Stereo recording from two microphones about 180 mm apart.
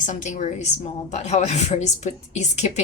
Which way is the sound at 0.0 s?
45° left (ahead or behind).